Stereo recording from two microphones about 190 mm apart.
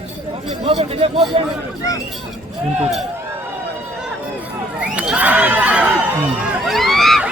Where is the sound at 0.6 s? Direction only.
30° right (ahead or behind).